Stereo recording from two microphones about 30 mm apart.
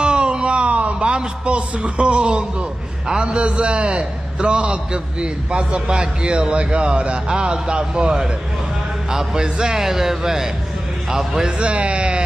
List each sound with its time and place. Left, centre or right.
0.0 s a sound: right
3.1 s speech: right
3.3 s a man's voice: right
7.2 s speech: right
9.1 s a man's voice: right
11.6 s speech: right